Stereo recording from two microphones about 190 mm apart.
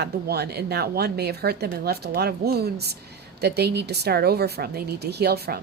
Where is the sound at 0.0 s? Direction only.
60° right (ahead or behind).